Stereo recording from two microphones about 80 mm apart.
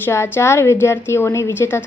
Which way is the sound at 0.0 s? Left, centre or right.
Left.